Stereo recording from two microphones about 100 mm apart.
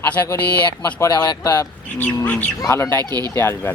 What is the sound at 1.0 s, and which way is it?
Speech, 30° left (ahead or behind).